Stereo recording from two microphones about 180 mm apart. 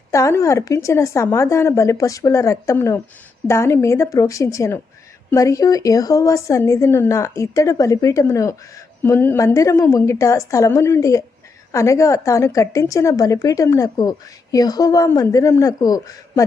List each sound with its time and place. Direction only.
0.1 s a woman's voice: 15° left (ahead or behind)